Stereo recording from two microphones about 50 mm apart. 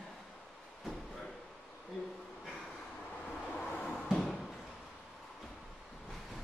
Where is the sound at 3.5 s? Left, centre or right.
Left.